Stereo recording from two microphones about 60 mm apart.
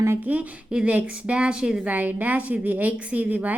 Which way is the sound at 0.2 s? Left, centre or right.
Right.